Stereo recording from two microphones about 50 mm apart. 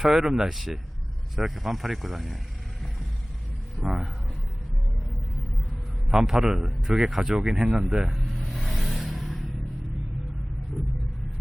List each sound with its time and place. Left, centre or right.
0.0 s a man's voice: centre
3.8 s a sound: centre
6.1 s a man's voice: centre
8.7 s vehicle: centre